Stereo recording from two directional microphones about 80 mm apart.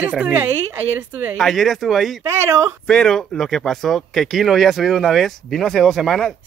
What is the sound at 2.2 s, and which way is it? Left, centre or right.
Speech, right.